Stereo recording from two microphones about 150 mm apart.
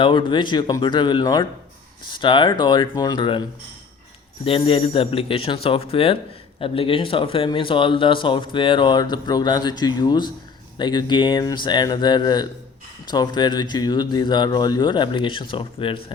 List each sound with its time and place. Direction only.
0.0 s speech: 35° left (ahead or behind)
4.4 s speech: 35° left (ahead or behind)